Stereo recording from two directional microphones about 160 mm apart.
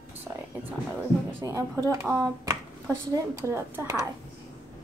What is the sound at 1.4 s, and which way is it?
A woman's voice, 20° right (ahead or behind).